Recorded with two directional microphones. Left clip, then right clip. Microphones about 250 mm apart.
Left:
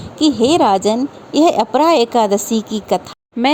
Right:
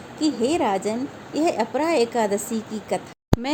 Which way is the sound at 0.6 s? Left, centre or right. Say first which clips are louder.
Left 10 dB; left.